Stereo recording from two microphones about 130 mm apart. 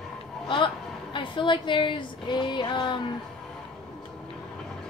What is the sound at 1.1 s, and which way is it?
A woman's voice, 40° left (ahead or behind).